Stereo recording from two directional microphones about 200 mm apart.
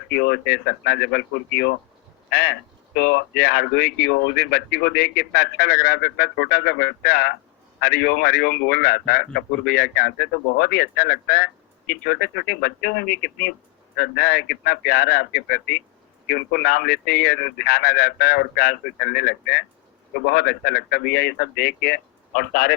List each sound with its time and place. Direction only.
0.1 s a man's voice: 55° left (ahead or behind)